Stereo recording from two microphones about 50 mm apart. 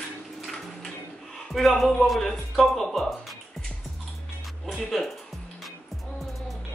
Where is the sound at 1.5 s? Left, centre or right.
Centre.